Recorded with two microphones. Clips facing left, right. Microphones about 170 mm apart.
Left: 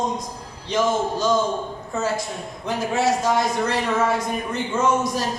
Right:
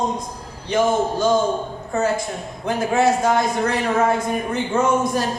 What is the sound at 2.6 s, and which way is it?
Speech, 55° right (ahead or behind).